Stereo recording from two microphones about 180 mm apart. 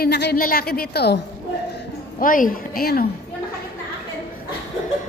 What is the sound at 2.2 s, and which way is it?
Speech, 50° left (ahead or behind).